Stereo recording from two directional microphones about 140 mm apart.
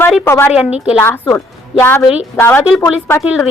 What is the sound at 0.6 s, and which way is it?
Speech, 5° right (ahead or behind).